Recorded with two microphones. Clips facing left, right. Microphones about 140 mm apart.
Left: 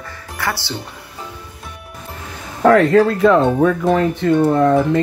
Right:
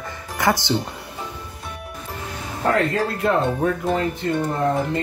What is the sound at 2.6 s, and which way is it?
Speech, 90° left.